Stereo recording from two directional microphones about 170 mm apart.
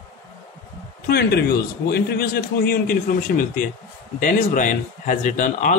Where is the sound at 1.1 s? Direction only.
75° left (ahead or behind).